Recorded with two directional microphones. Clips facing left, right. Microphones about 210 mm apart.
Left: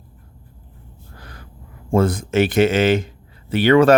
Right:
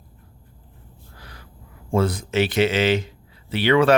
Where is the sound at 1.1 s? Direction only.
50° left (ahead or behind).